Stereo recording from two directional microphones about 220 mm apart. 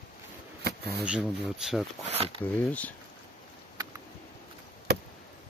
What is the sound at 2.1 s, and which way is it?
Speech, 25° right (ahead or behind).